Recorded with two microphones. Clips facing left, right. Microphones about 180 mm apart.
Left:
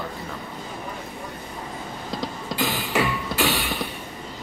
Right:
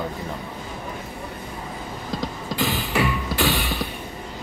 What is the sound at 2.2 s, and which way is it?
Music, centre (ahead or behind).